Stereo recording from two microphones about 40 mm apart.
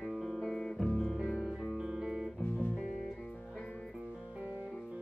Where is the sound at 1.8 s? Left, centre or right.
Centre.